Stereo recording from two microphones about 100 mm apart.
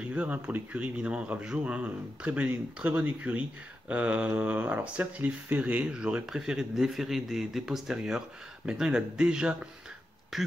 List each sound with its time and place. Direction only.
0.0 s speech: 10° right (ahead or behind)